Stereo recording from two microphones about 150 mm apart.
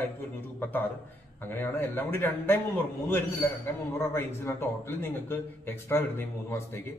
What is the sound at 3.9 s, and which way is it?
A man's voice, 15° left (ahead or behind).